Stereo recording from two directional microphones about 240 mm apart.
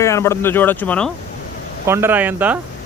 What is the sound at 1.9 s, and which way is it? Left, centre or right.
Speech, centre.